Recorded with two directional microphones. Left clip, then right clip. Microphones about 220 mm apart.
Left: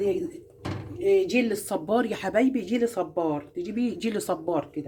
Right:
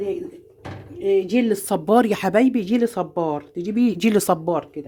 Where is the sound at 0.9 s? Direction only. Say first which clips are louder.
Right 3 dB; 40° right (ahead or behind).